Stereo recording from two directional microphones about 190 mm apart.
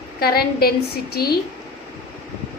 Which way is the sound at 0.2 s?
55° left (ahead or behind).